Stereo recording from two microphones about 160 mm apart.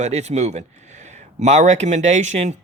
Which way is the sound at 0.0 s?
45° right (ahead or behind).